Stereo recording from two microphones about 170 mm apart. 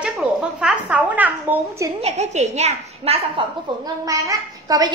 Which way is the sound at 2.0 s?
40° right (ahead or behind).